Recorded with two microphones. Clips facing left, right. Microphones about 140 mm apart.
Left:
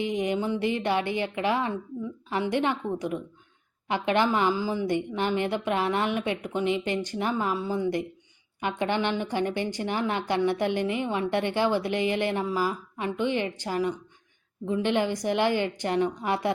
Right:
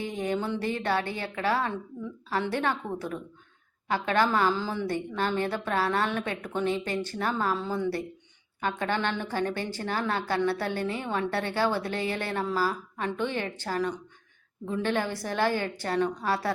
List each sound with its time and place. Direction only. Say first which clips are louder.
0.0 s a woman's voice: left 3 dB; 15° left (ahead or behind)